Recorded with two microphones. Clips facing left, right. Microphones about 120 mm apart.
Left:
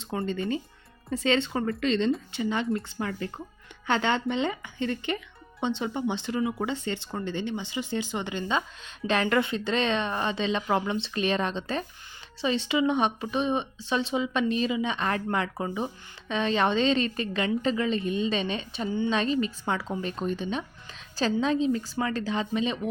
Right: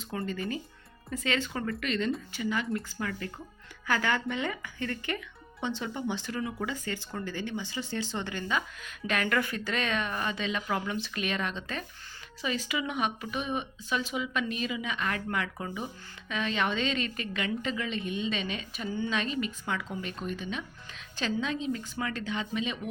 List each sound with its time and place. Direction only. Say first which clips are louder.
0.0 s a woman's voice: left 4 dB; 30° left (ahead or behind)